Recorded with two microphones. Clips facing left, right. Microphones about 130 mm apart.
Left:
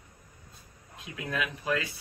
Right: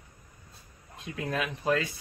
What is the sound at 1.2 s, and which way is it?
Speech, 40° right (ahead or behind).